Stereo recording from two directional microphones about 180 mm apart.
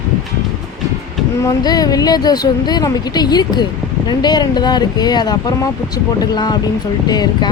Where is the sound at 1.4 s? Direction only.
20° left (ahead or behind).